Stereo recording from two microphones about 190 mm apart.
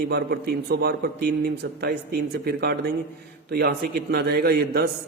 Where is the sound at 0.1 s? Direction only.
55° right (ahead or behind).